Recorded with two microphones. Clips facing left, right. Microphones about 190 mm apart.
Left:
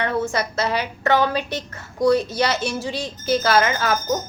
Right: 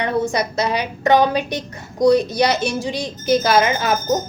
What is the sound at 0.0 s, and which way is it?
A child's voice, 15° right (ahead or behind).